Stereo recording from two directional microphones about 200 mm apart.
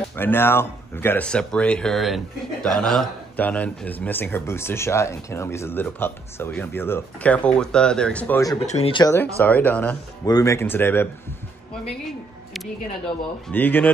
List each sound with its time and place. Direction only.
0.1 s speech: 10° left (ahead or behind)
8.5 s speech: 30° left (ahead or behind)
9.0 s speech: 10° left (ahead or behind)
13.5 s speech: 10° left (ahead or behind)